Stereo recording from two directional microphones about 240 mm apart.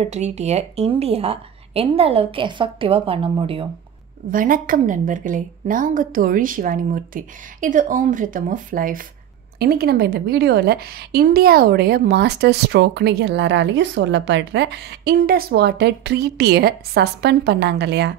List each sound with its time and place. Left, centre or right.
0.0 s speech: right
4.3 s a woman's voice: right